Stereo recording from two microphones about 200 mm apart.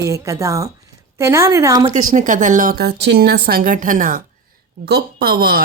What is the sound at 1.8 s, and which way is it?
A woman's voice, 40° right (ahead or behind).